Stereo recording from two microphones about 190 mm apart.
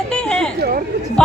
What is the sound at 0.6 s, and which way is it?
Speech, 50° right (ahead or behind).